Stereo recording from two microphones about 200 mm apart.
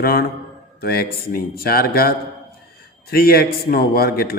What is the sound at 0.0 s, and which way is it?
A man's voice, 50° left (ahead or behind).